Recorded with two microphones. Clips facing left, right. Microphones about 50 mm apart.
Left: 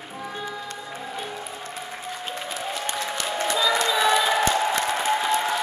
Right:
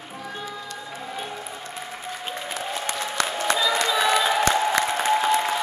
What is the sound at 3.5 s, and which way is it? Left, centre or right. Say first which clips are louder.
Crowd: even; centre.